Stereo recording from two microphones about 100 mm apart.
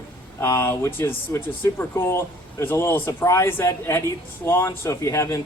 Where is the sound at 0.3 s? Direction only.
30° left (ahead or behind).